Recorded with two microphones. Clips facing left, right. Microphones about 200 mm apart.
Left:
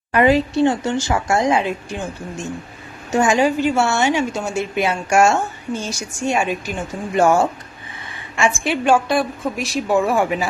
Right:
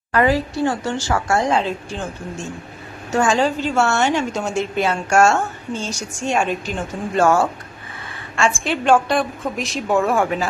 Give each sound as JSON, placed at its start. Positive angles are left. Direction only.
{"t": 0.1, "sound": "a woman's voice", "side_deg": 20}